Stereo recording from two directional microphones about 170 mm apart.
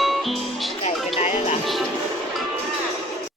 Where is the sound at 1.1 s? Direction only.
40° left (ahead or behind).